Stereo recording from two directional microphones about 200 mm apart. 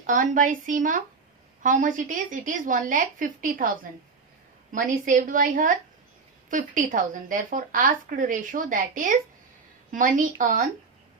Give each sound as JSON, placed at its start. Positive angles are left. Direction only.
{"t": 0.0, "sound": "speech", "side_deg": -40}